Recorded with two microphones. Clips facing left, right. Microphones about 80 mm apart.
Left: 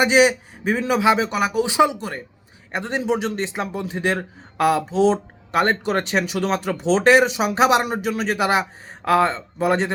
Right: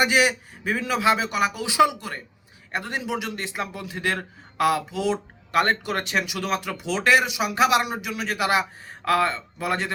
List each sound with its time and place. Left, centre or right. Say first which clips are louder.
0.0 s a man's voice: left 5 dB; left